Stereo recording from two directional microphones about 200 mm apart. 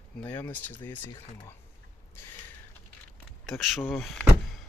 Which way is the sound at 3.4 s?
Centre (ahead or behind).